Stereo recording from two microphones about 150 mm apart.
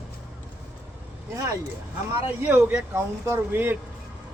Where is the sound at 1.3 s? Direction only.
20° right (ahead or behind).